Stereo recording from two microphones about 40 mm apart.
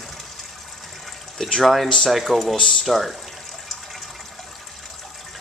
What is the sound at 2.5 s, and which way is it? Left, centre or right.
Speech, left.